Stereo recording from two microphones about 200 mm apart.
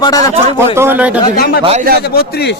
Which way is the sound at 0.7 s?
10° right (ahead or behind).